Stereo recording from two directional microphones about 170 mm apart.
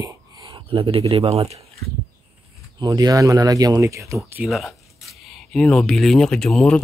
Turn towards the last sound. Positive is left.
turn(degrees=5)  # may be behind; listen again after turning